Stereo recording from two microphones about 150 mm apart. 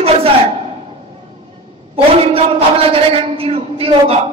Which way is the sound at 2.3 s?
40° right (ahead or behind).